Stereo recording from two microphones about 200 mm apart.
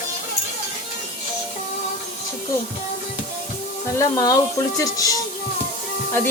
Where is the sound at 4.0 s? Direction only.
15° left (ahead or behind).